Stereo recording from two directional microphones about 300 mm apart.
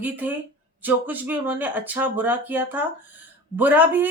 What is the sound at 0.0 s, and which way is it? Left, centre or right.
Speech, centre.